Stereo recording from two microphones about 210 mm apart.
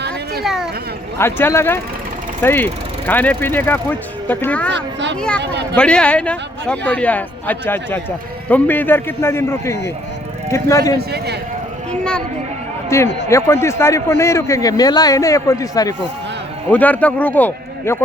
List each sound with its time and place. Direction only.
0.4 s a sound: centre (ahead or behind)
1.2 s a man's voice: 10° left (ahead or behind)
4.7 s a child's voice: 55° right (ahead or behind)
5.7 s a man's voice: 5° left (ahead or behind)
11.9 s a sound: 5° left (ahead or behind)
12.9 s a man's voice: 15° left (ahead or behind)